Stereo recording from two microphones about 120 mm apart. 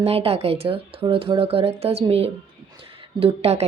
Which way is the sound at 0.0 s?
55° right (ahead or behind).